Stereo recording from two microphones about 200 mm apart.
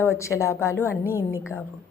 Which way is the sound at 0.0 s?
15° left (ahead or behind).